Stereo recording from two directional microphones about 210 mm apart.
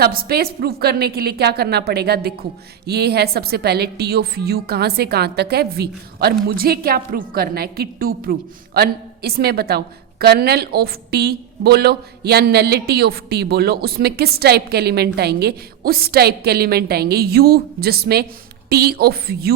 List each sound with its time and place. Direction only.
0.0 s a woman's voice: 45° right (ahead or behind)